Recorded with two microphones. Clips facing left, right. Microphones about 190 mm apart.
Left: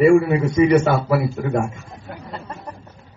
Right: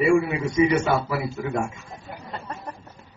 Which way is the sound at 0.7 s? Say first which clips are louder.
Left 6 dB; 70° left (ahead or behind).